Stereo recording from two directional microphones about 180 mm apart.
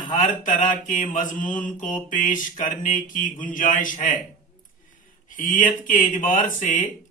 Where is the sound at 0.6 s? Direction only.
45° left (ahead or behind).